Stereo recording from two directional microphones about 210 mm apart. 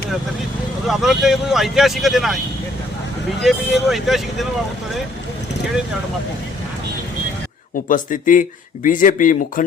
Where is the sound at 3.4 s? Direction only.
Centre (ahead or behind).